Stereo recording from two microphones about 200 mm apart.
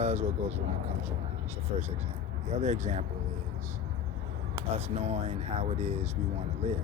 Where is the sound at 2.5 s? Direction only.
35° right (ahead or behind).